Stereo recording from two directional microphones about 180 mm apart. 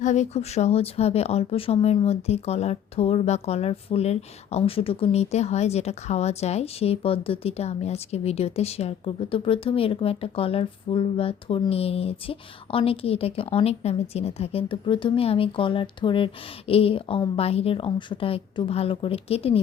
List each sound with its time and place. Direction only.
0.0 s speech: 40° left (ahead or behind)